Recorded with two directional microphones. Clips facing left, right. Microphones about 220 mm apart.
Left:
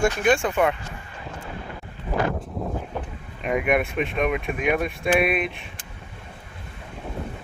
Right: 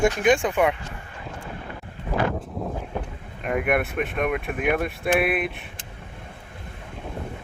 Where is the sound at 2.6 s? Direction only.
Centre (ahead or behind).